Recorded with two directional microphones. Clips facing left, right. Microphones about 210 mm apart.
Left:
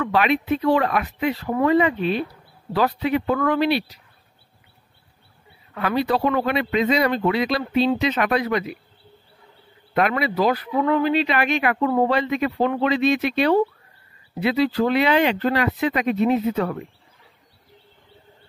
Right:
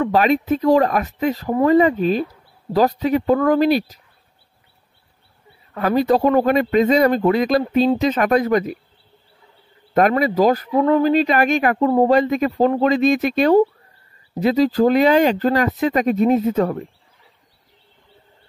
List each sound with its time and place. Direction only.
0.0 s speech: 40° right (ahead or behind)
5.8 s speech: 45° right (ahead or behind)
9.9 s speech: 45° right (ahead or behind)
12.2 s speech: 45° right (ahead or behind)